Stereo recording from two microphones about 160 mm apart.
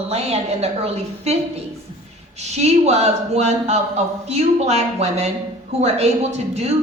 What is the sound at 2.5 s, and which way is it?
A woman's voice, 45° right (ahead or behind).